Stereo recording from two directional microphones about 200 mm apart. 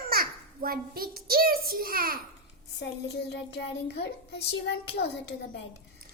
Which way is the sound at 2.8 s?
60° left (ahead or behind).